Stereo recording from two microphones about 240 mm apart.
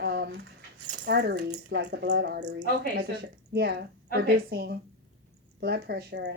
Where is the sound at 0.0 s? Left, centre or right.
Right.